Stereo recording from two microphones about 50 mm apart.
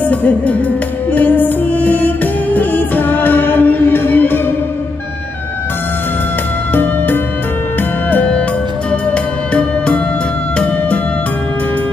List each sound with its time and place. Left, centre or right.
0.0 s music: left
6.7 s music: left
8.1 s music: left